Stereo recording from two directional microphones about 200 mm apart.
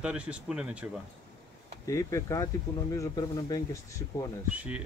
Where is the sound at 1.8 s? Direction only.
15° left (ahead or behind).